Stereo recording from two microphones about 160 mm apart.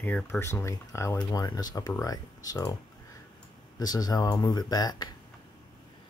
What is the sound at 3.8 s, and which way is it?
Speech, 25° left (ahead or behind).